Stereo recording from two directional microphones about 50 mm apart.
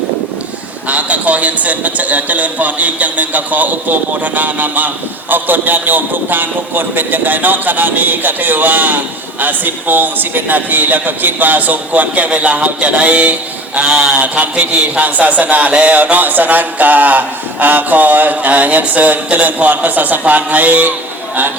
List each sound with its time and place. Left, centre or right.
0.9 s a man's voice: right
12.3 s a sound: right
14.1 s a man's voice: right